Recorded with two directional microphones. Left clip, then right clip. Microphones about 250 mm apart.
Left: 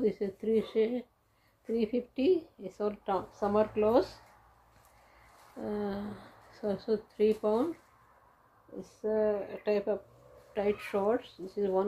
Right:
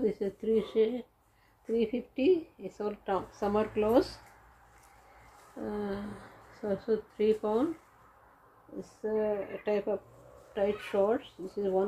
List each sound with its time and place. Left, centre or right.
0.0 s speech: centre
5.7 s speech: centre
9.0 s speech: centre